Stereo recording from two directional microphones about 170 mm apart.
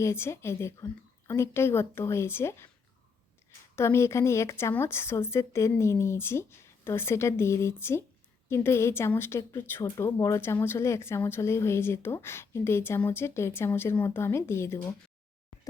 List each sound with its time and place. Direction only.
0.0 s a woman's voice: 15° left (ahead or behind)
3.8 s a woman's voice: 15° left (ahead or behind)